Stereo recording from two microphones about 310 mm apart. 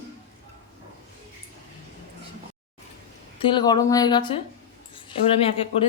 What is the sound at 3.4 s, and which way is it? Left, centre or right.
Speech, centre.